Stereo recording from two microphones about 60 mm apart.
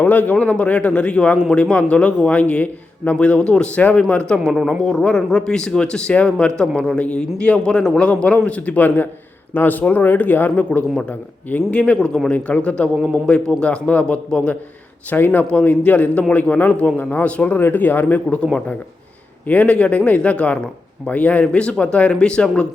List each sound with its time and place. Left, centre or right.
0.0 s a man's voice: left
4.4 s a man's voice: centre; by 11.9 s left
11.9 s a man's voice: centre
12.3 s a man's voice: left
13.0 s a man's voice: centre
13.2 s a man's voice: centre
15.1 s a man's voice: left
17.6 s speech: left
19.5 s a man's voice: left